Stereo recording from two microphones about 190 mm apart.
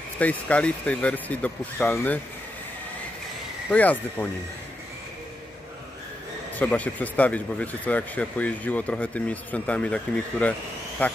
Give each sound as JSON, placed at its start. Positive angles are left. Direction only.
{"t": 0.2, "sound": "speech", "side_deg": 5}
{"t": 3.7, "sound": "speech", "side_deg": 10}
{"t": 6.5, "sound": "speech", "side_deg": 10}